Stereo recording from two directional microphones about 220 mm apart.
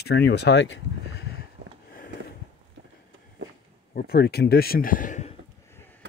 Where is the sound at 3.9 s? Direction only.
45° left (ahead or behind).